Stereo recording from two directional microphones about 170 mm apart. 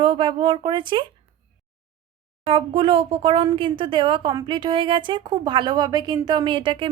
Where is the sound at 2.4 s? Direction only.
35° right (ahead or behind).